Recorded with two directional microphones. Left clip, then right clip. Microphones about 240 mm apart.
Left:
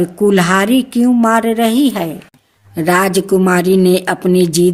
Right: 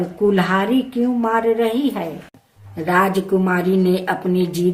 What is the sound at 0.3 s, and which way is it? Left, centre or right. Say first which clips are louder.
A woman's voice: left 5 dB; left.